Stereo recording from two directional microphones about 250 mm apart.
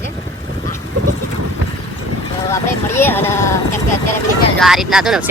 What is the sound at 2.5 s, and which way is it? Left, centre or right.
Vehicle, centre.